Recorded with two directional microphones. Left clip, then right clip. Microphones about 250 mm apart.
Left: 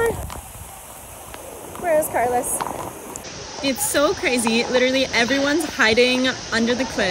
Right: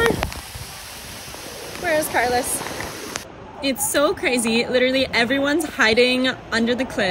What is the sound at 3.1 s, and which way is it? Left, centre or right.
Speech, centre.